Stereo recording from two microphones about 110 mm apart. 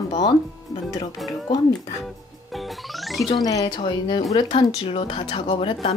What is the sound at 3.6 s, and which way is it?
Speech, 40° left (ahead or behind).